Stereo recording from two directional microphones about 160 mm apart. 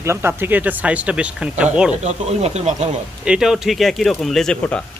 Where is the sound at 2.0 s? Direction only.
40° right (ahead or behind).